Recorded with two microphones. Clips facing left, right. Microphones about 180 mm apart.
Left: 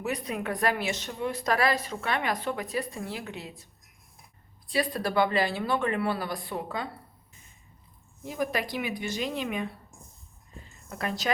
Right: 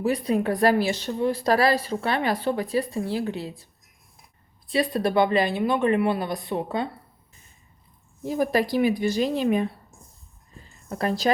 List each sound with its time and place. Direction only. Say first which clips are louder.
0.0 s a woman's voice: right 8 dB; 30° right (ahead or behind)
4.7 s speech: right 5 dB; 25° right (ahead or behind)
8.2 s a woman's voice: right 7 dB; 35° right (ahead or behind)
10.8 s a woman's voice: right 7 dB; 35° right (ahead or behind)